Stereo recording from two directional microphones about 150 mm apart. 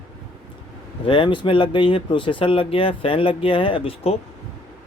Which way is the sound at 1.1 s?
35° left (ahead or behind).